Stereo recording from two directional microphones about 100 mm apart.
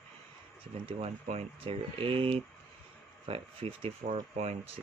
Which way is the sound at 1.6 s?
65° right (ahead or behind).